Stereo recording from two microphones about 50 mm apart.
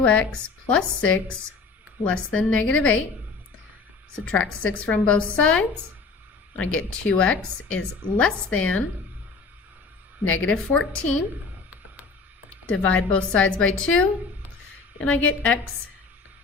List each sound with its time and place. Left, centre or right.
0.0 s a woman's voice: left
4.3 s a woman's voice: left
10.2 s a woman's voice: left
12.6 s a woman's voice: left